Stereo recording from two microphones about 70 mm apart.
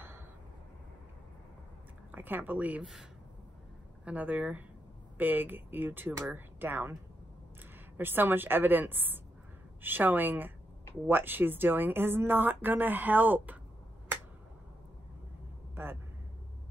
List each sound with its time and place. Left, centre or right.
2.1 s speech: right
2.8 s speech: centre
4.0 s speech: right
8.0 s speech: right
15.7 s vehicle: right